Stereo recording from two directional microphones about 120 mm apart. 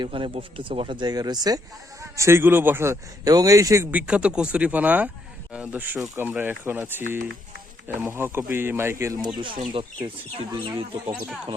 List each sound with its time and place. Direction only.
0.0 s speech: 45° right (ahead or behind); by 3.8 s 25° right (ahead or behind)
3.9 s speech: 10° right (ahead or behind)
8.0 s speech: 20° right (ahead or behind)
9.4 s speech: 45° right (ahead or behind)